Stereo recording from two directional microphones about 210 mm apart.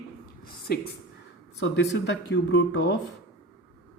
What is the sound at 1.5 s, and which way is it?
Speech, 60° left (ahead or behind).